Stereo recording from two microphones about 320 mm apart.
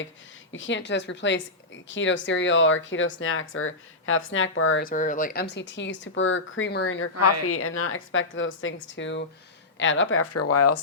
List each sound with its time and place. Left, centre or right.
0.5 s a woman's voice: left